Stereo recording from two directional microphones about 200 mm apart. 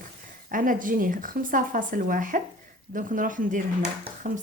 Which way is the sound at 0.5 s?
40° right (ahead or behind).